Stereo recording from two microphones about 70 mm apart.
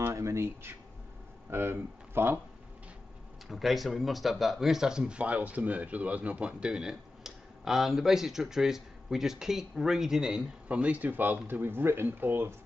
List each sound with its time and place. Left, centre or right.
0.0 s speech: right
3.4 s speech: centre
10.7 s speech: right